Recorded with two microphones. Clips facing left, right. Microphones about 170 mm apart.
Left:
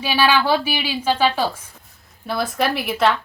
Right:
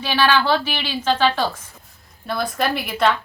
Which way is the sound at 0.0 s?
10° left (ahead or behind).